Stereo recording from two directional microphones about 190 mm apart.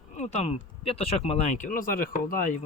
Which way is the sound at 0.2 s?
35° left (ahead or behind).